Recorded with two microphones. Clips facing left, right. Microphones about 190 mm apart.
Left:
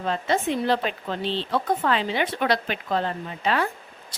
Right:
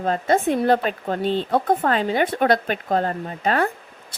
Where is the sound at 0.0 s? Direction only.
45° right (ahead or behind).